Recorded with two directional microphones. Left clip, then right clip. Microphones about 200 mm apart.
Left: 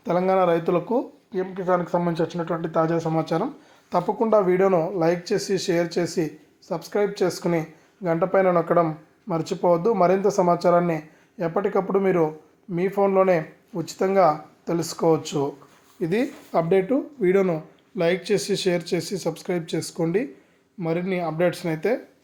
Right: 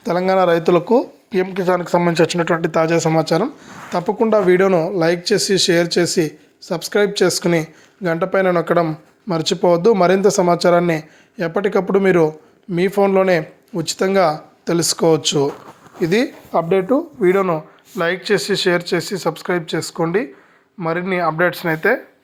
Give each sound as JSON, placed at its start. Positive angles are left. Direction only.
{"t": 0.0, "sound": "speech", "side_deg": -25}
{"t": 17.2, "sound": "speech", "side_deg": 10}